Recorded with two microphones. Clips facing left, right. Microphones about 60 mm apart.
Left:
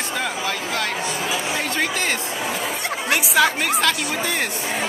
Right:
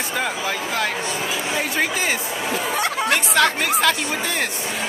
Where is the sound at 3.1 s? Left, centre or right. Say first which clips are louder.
Left 2 dB; centre.